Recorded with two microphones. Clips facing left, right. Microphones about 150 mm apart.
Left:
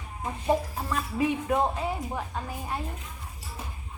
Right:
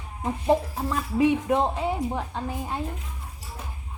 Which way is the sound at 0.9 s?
20° right (ahead or behind).